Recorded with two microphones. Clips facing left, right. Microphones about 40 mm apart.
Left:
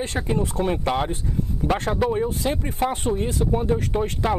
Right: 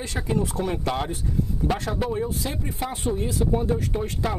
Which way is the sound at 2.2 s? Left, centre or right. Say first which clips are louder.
Left 4 dB; left.